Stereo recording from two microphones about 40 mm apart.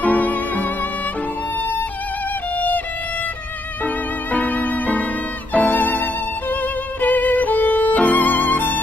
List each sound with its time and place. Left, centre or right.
0.0 s music: left
3.8 s music: left
5.7 s violin: left
7.9 s music: left